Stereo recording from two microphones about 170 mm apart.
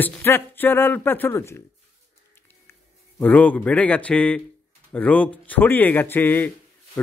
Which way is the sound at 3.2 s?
10° left (ahead or behind).